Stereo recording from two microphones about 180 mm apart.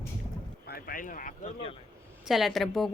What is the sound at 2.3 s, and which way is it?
Speech, centre (ahead or behind).